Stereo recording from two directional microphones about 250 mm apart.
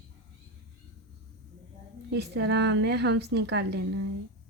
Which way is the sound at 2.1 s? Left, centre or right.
Right.